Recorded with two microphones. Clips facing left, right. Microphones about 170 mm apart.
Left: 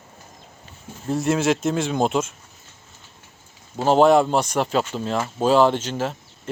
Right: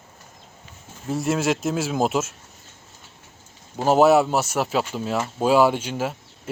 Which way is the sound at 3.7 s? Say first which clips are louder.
Left 1 dB; 5° right (ahead or behind).